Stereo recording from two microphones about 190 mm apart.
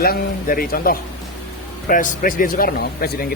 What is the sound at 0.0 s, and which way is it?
Speech, 50° left (ahead or behind).